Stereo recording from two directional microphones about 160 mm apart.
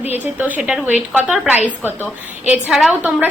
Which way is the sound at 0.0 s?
10° right (ahead or behind).